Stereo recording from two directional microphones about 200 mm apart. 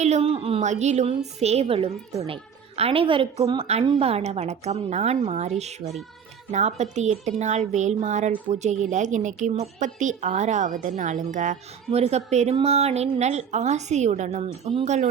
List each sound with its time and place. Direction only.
0.0 s a child's voice: 30° right (ahead or behind)